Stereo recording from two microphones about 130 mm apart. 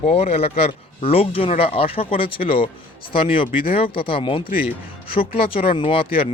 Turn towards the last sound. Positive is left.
turn(degrees=45)  # may be behind; listen again after turning